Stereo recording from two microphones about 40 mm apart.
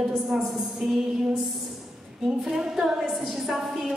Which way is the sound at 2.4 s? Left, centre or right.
Centre.